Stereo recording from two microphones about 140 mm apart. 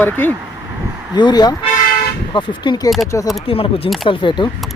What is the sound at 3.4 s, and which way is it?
Speech, 40° left (ahead or behind).